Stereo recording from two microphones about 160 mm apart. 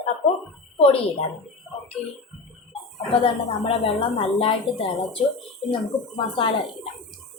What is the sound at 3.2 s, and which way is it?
Speech, 35° left (ahead or behind).